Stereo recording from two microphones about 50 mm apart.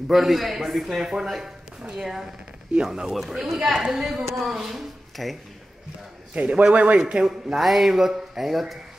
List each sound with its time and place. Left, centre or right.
0.1 s a woman's voice: centre
4.2 s speech: centre
6.3 s a man's voice: centre
7.2 s speech: centre